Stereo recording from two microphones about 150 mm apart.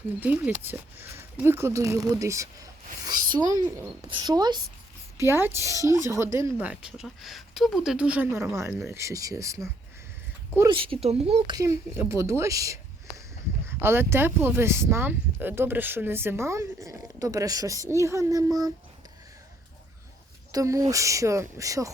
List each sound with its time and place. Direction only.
0.2 s speech: 10° right (ahead or behind); by 4.6 s 30° right (ahead or behind)
5.2 s speech: 15° right (ahead or behind)
10.7 s speech: 35° right (ahead or behind)
11.4 s speech: 25° right (ahead or behind)
20.5 s speech: 20° right (ahead or behind)